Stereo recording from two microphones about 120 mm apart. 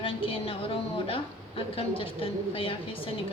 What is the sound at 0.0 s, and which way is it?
A woman's voice, 50° left (ahead or behind).